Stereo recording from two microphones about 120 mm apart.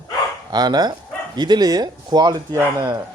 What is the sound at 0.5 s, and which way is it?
Speech, 35° right (ahead or behind).